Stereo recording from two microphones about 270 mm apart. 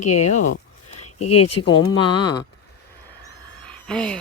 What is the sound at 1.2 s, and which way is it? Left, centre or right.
Speech, left.